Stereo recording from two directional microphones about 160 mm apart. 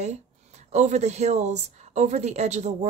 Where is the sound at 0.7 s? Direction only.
45° right (ahead or behind).